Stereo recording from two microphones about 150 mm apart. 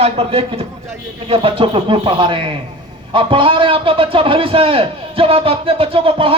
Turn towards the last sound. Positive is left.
turn(degrees=-40)  # may be behind; listen again after turning